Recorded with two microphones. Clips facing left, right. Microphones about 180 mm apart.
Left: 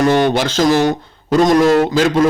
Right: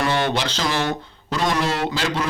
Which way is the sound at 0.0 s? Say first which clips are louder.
Left 8 dB; 45° left (ahead or behind).